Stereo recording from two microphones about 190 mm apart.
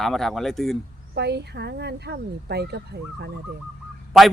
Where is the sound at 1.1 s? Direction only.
60° right (ahead or behind).